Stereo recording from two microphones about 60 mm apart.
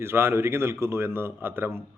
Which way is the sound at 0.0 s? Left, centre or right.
Right.